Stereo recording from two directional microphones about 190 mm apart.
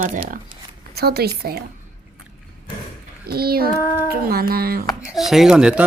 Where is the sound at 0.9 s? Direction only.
55° right (ahead or behind).